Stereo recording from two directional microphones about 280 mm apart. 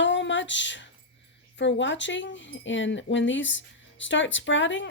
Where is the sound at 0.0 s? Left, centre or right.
Left.